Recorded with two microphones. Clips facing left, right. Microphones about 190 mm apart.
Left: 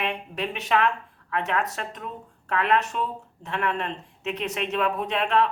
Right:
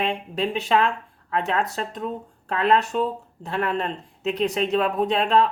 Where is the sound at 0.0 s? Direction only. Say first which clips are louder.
Right 4 dB; 30° right (ahead or behind).